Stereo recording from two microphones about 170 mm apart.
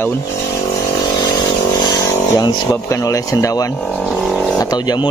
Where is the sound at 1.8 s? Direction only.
25° left (ahead or behind).